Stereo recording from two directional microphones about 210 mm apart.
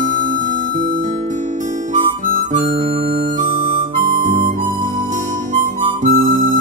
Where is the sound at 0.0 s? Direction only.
40° right (ahead or behind).